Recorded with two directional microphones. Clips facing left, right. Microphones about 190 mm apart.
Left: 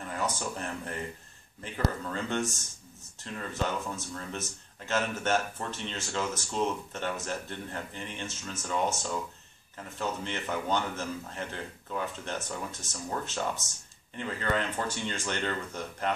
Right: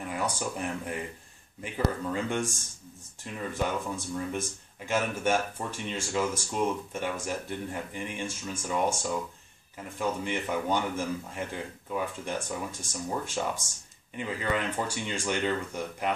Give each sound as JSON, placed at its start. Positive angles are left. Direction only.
{"t": 0.0, "sound": "speech", "side_deg": -10}